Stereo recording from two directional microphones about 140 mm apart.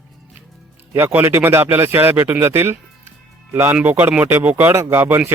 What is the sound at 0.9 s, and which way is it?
Speech, 15° right (ahead or behind).